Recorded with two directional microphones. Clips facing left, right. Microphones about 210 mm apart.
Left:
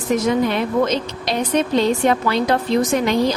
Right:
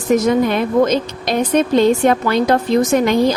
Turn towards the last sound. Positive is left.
turn(degrees=-50)  # may be behind; listen again after turning